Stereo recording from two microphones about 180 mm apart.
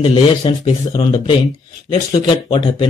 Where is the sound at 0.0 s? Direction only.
30° left (ahead or behind).